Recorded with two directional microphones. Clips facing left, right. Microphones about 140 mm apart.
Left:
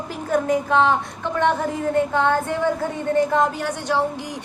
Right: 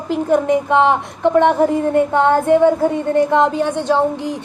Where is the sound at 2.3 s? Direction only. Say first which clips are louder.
Right 9 dB; 25° right (ahead or behind).